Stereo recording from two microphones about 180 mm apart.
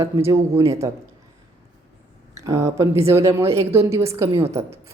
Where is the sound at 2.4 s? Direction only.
15° right (ahead or behind).